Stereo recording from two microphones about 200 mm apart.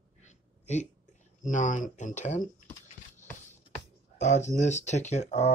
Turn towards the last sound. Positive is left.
turn(degrees=35)  # may be behind; listen again after turning